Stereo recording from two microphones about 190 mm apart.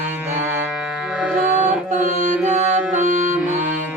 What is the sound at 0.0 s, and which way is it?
Music, 10° right (ahead or behind).